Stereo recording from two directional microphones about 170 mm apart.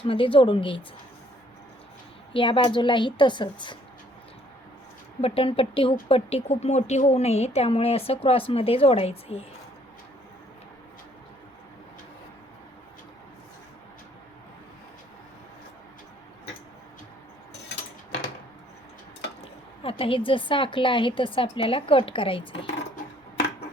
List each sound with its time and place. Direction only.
0.0 s a woman's voice: 30° left (ahead or behind)
2.3 s a woman's voice: 30° left (ahead or behind)
5.2 s a woman's voice: 35° left (ahead or behind)
19.8 s a woman's voice: 30° left (ahead or behind)